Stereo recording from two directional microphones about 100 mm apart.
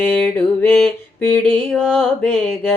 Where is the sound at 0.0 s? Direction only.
15° left (ahead or behind).